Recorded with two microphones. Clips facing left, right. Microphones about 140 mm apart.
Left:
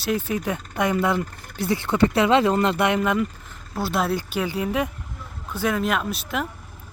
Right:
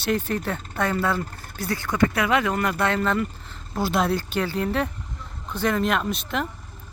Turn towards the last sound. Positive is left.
turn(degrees=5)  # may be behind; listen again after turning